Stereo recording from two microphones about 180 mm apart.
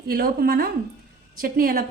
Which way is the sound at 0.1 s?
55° right (ahead or behind).